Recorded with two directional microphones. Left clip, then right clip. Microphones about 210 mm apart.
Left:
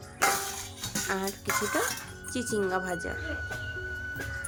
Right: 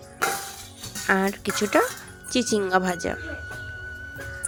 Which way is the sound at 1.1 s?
35° right (ahead or behind).